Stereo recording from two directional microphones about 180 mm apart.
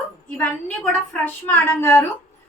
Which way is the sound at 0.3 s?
5° left (ahead or behind).